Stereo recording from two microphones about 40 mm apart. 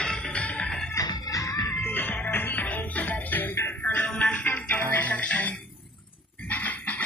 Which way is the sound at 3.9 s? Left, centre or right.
Left.